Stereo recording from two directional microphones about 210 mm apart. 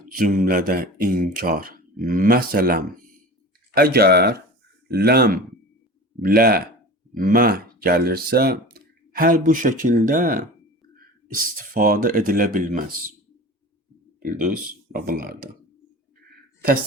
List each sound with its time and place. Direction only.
0.1 s speech: 40° right (ahead or behind)
11.5 s speech: 40° right (ahead or behind)
14.2 s speech: 40° right (ahead or behind)